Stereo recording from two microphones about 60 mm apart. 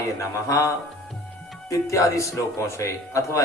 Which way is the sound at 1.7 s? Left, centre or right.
Left.